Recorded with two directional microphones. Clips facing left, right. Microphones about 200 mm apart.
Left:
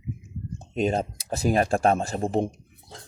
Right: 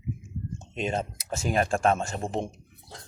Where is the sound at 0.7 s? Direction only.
35° left (ahead or behind).